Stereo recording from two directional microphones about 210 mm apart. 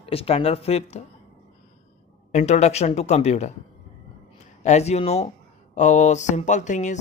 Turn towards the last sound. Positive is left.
turn(degrees=35)  # may be behind; listen again after turning